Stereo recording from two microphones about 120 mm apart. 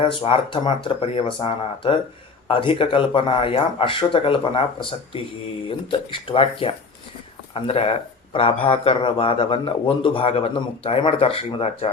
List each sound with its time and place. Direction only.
0.0 s speech: 50° left (ahead or behind)